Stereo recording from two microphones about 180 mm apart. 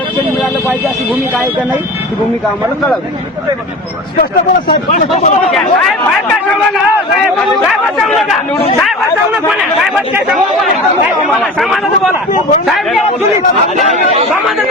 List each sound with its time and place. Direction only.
4.9 s speech: 45° left (ahead or behind)
7.9 s speech: centre (ahead or behind)
11.3 s speech: centre (ahead or behind)
12.3 s speech: 50° left (ahead or behind)
12.6 s speech: centre (ahead or behind)